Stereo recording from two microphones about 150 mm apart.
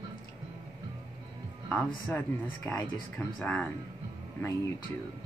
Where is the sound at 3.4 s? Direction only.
10° left (ahead or behind).